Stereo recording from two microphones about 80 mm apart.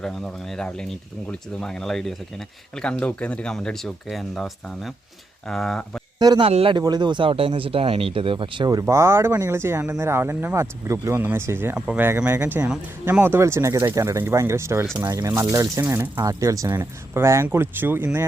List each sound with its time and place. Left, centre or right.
0.0 s speech: centre
6.1 s a man's voice: right
8.1 s speech: right
8.9 s speech: right
13.4 s speech: right